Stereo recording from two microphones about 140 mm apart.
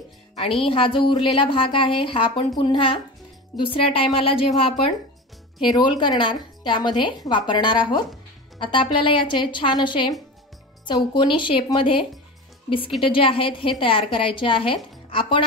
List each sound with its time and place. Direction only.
0.6 s a woman's voice: 40° left (ahead or behind)